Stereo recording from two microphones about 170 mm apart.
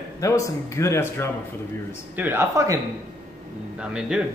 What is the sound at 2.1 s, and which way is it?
Speech, 15° right (ahead or behind).